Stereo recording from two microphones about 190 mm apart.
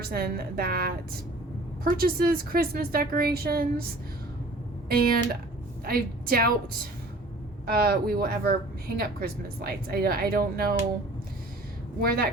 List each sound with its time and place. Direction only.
0.0 s a woman's voice: 55° right (ahead or behind)
4.9 s a woman's voice: 55° right (ahead or behind)
7.7 s a woman's voice: 55° right (ahead or behind)
11.9 s a woman's voice: 55° right (ahead or behind)